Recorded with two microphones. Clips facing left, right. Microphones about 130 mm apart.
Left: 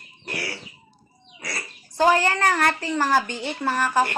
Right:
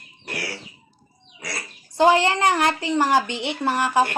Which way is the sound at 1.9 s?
20° right (ahead or behind).